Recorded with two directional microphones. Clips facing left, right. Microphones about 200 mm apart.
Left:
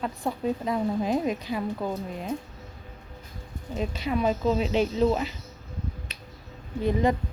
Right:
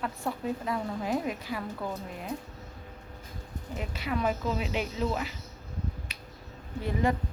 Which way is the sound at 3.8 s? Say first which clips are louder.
Left 5 dB; 20° left (ahead or behind).